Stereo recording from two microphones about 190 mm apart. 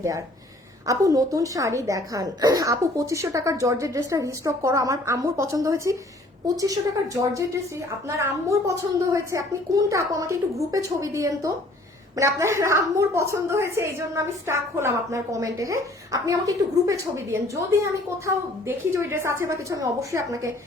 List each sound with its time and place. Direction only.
0.9 s a woman's voice: 15° right (ahead or behind)
18.6 s a woman's voice: 15° right (ahead or behind)